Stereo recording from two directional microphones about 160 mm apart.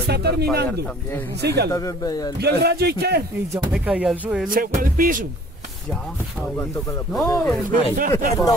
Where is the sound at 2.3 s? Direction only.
90° right.